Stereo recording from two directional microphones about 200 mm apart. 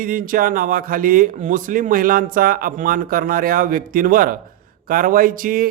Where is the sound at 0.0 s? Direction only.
45° right (ahead or behind).